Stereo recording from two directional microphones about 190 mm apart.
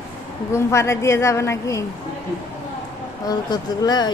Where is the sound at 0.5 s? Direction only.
15° left (ahead or behind).